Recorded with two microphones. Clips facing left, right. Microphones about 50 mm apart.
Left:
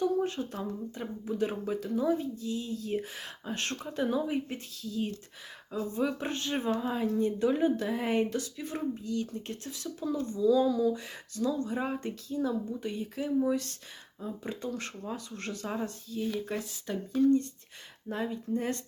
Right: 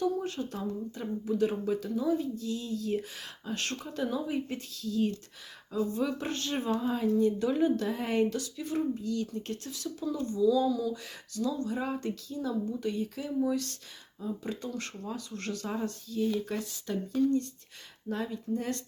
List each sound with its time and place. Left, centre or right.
0.2 s speech: left
8.3 s speech: left